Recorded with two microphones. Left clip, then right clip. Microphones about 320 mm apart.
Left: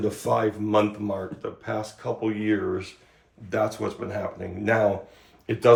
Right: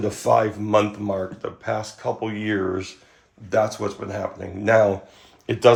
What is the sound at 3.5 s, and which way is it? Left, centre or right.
Speech, centre.